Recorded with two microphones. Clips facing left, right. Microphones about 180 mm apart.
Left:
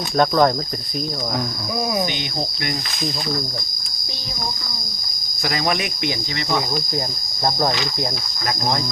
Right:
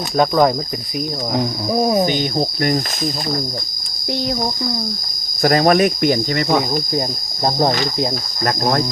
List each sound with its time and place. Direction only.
0.2 s cricket: 5° right (ahead or behind)
1.7 s speech: 40° right (ahead or behind)
5.4 s cricket: 50° right (ahead or behind)
8.4 s cricket: 50° right (ahead or behind)